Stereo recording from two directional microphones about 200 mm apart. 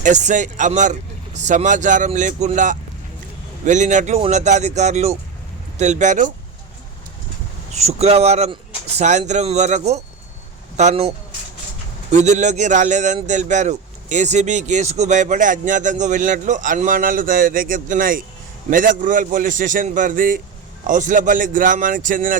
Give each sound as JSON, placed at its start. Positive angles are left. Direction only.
{"t": 0.0, "sound": "speech", "side_deg": -35}
{"t": 7.7, "sound": "speech", "side_deg": -30}
{"t": 12.1, "sound": "speech", "side_deg": -35}